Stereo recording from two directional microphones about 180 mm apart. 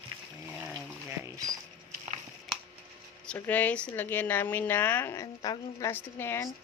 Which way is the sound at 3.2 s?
5° left (ahead or behind).